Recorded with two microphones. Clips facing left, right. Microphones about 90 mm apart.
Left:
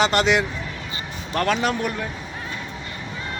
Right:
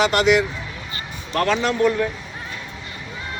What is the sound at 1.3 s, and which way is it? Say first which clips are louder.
Speech: right 1 dB; 15° left (ahead or behind).